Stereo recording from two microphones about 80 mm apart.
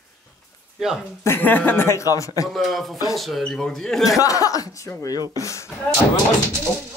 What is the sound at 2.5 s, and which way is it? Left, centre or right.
A man's voice, centre.